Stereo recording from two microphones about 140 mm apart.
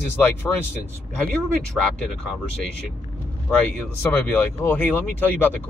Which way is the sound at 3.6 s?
15° left (ahead or behind).